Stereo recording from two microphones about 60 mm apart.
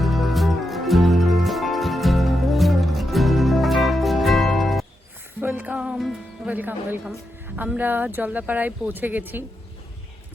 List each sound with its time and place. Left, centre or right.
0.0 s music: centre
5.4 s music: right
5.7 s music: centre
6.5 s speech: right